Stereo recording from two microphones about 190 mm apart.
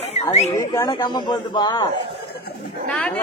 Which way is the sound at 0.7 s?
20° left (ahead or behind).